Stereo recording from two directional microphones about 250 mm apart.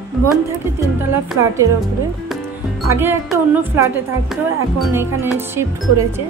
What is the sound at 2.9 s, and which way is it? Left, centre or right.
A woman's voice, centre.